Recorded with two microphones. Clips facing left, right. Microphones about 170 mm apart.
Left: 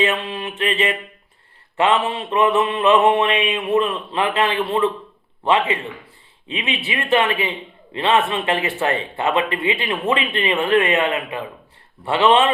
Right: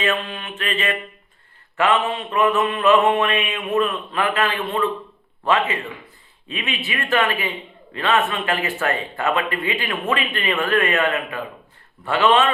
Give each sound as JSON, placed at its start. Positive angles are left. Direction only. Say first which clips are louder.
{"t": 0.0, "sound": "speech", "louder": "left 3 dB", "side_deg": 30}
{"t": 6.5, "sound": "speech", "louder": "left 2 dB", "side_deg": 25}